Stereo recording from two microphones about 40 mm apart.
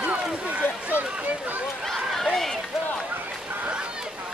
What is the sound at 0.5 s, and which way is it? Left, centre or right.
Run, right.